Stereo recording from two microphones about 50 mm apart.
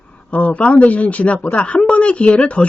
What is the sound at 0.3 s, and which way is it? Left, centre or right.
Speech, left.